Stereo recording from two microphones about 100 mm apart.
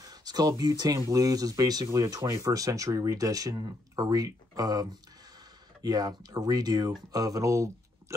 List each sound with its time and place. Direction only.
0.0 s speech: 40° right (ahead or behind)